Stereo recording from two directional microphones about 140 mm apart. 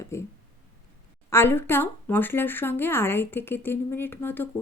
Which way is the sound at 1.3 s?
15° left (ahead or behind).